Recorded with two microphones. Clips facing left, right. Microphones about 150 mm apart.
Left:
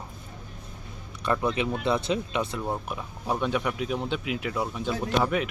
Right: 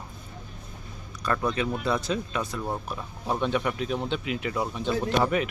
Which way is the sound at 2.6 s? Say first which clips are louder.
Left 1 dB; 10° left (ahead or behind).